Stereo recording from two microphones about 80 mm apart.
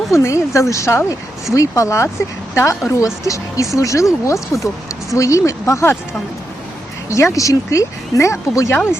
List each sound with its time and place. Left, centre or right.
0.1 s speech: left
7.1 s speech: left
8.7 s speech: left